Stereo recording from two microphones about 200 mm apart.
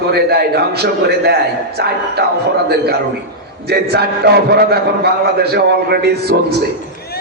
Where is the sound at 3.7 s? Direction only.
55° right (ahead or behind).